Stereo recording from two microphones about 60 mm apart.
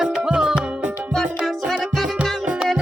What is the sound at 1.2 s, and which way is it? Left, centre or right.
Music, centre.